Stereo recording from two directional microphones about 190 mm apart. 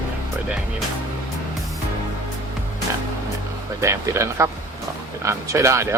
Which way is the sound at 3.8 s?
15° right (ahead or behind).